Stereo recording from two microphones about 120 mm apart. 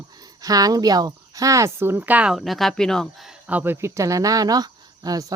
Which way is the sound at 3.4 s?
15° right (ahead or behind).